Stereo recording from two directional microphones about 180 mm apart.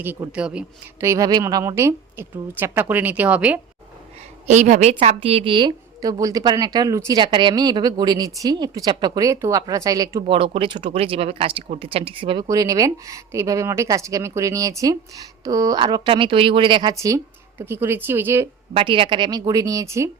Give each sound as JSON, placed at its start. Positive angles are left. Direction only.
{"t": 0.0, "sound": "a woman's voice", "side_deg": -10}
{"t": 4.4, "sound": "a woman's voice", "side_deg": -40}
{"t": 18.7, "sound": "a woman's voice", "side_deg": -30}